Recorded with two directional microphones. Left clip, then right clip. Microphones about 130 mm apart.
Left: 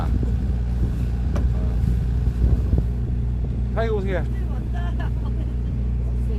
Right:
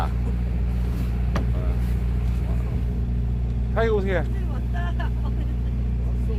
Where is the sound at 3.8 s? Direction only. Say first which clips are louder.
Right 2 dB; 65° right (ahead or behind).